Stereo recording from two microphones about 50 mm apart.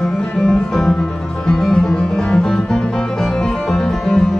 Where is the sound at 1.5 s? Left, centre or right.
Centre.